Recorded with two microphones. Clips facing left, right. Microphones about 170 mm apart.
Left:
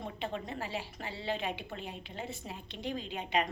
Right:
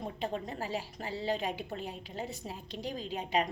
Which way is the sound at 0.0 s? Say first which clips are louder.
Right 2 dB; 40° right (ahead or behind).